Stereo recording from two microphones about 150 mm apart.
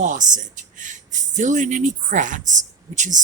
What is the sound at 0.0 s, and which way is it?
Speech, 55° right (ahead or behind).